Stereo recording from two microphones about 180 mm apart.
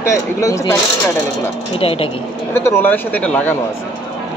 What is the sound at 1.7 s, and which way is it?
Speech, 30° left (ahead or behind).